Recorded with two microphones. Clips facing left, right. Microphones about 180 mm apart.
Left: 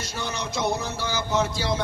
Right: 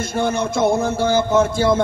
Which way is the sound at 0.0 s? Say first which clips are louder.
Right 11 dB; 50° right (ahead or behind).